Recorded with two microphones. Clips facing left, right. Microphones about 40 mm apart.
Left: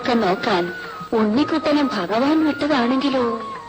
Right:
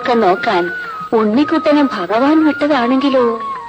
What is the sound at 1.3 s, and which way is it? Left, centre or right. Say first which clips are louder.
Speech: right 7 dB; right.